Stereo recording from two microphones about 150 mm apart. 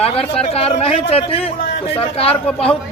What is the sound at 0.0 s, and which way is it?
Speech, 40° left (ahead or behind).